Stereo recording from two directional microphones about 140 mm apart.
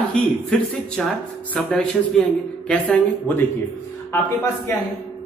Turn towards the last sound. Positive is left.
turn(degrees=15)  # may be behind; listen again after turning